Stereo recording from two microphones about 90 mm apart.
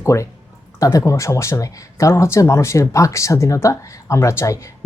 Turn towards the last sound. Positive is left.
turn(degrees=35)  # may be behind; listen again after turning